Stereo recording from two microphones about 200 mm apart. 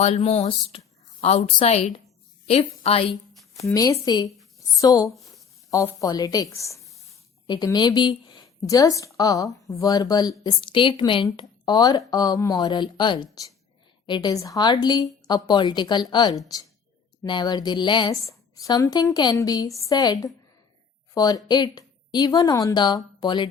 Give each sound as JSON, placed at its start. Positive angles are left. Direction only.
{"t": 0.0, "sound": "a woman's voice", "side_deg": 30}
{"t": 3.6, "sound": "a woman's voice", "side_deg": 15}